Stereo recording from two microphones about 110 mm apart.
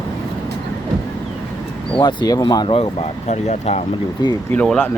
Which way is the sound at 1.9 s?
40° left (ahead or behind).